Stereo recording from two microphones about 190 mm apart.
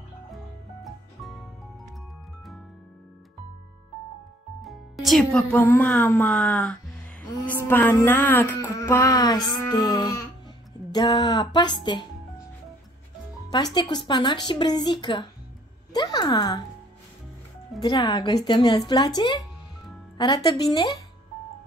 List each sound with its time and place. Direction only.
0.8 s music: centre (ahead or behind)
4.6 s a woman's voice: centre (ahead or behind)
7.6 s a sound: 10° left (ahead or behind)
10.9 s a woman's voice: 20° left (ahead or behind)
13.7 s a woman's voice: 25° left (ahead or behind)
17.8 s a woman's voice: 25° left (ahead or behind)